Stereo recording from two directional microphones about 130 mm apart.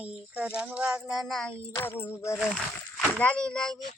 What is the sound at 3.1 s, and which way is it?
Speech, 10° left (ahead or behind).